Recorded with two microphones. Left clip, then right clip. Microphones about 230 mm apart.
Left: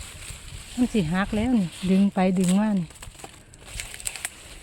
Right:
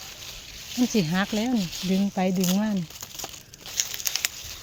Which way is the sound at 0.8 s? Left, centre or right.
Centre.